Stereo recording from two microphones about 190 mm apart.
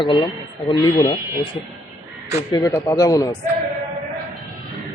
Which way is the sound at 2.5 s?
15° left (ahead or behind).